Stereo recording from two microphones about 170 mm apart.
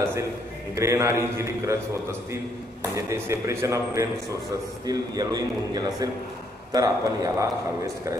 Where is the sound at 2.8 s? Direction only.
15° right (ahead or behind).